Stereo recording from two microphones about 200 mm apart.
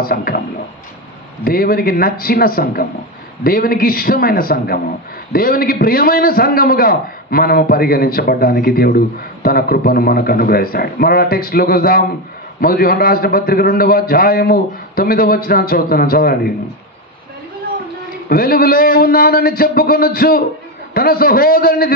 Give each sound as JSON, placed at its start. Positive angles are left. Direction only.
{"t": 0.0, "sound": "a man's voice", "side_deg": 50}
{"t": 1.4, "sound": "a man's voice", "side_deg": 50}
{"t": 18.3, "sound": "a man's voice", "side_deg": 50}